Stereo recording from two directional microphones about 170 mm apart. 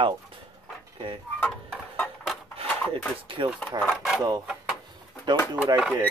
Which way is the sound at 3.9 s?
Centre (ahead or behind).